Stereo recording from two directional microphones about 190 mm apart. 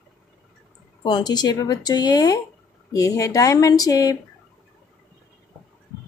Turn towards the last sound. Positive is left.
turn(degrees=20)  # may be behind; listen again after turning